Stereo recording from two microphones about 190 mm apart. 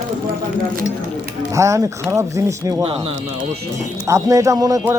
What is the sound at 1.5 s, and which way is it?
Speech, 15° right (ahead or behind).